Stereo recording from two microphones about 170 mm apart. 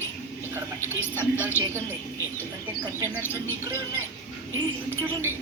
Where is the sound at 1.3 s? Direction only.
10° right (ahead or behind).